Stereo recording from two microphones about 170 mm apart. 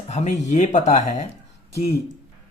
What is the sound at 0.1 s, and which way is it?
Speech, 40° left (ahead or behind).